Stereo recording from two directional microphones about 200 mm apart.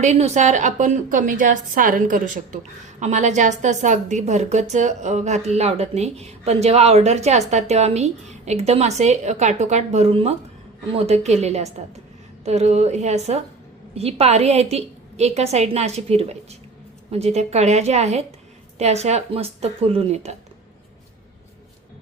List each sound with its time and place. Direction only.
0.0 s a woman's voice: 35° right (ahead or behind)